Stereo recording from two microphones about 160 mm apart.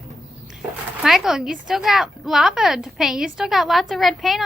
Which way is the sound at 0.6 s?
Centre (ahead or behind).